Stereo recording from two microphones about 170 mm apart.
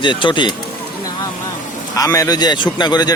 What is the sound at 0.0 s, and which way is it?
Speech, 30° left (ahead or behind).